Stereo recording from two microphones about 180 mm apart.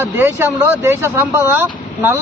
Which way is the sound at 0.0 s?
15° right (ahead or behind).